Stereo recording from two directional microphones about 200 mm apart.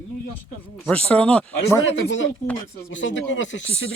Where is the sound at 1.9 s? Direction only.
70° left (ahead or behind).